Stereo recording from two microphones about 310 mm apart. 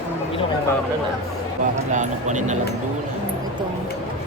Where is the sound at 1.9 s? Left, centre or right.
Right.